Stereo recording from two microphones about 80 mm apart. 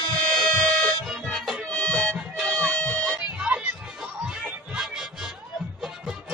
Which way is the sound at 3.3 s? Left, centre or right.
Centre.